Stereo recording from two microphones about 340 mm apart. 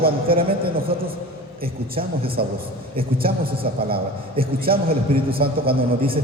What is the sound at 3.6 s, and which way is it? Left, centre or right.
A man's voice, right.